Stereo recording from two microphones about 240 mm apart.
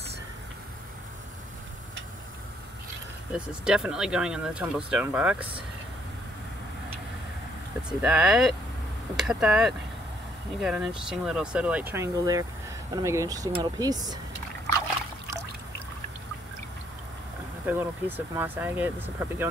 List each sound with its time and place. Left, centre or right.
3.3 s speech: centre
8.0 s speech: centre
17.6 s speech: centre